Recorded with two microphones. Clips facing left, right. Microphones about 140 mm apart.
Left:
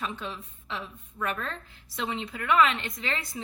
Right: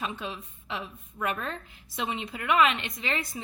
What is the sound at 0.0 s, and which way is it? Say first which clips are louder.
A woman's voice: right 1 dB; 10° right (ahead or behind).